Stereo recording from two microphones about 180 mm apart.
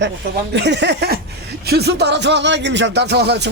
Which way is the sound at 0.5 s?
75° right (ahead or behind).